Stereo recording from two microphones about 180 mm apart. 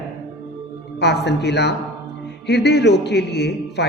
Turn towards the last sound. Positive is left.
turn(degrees=70)  # may be behind; listen again after turning